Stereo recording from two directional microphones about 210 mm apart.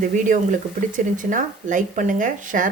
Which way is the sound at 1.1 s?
40° right (ahead or behind).